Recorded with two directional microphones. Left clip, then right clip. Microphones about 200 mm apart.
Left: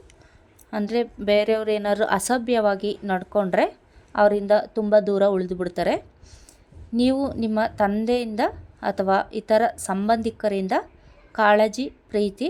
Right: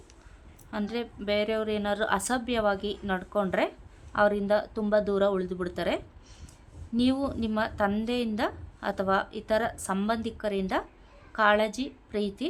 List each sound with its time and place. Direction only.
0.7 s a woman's voice: 20° left (ahead or behind)